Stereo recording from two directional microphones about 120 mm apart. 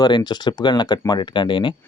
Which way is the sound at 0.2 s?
35° left (ahead or behind).